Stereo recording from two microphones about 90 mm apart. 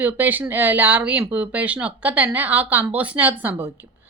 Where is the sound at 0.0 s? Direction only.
20° right (ahead or behind).